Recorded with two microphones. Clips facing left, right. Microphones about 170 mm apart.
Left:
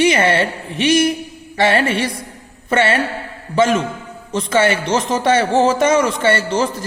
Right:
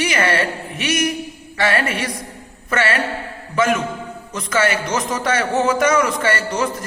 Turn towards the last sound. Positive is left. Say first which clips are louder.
# left 3 dB
turn(degrees=30)  # may be behind; listen again after turning